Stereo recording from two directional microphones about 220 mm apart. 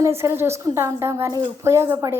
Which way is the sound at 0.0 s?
10° right (ahead or behind).